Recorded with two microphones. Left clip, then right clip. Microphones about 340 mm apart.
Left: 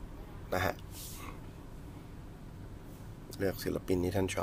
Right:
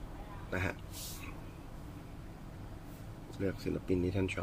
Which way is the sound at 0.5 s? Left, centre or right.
Left.